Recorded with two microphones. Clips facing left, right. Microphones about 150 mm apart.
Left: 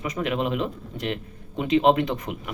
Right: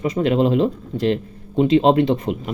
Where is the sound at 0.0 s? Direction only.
30° right (ahead or behind).